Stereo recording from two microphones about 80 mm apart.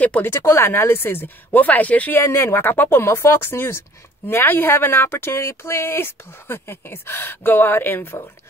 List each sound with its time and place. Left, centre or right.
0.0 s speech: centre
0.3 s speech: left
2.2 s speech: left